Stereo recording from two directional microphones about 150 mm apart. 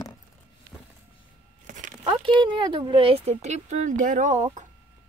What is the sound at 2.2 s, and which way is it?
Speech, 30° right (ahead or behind).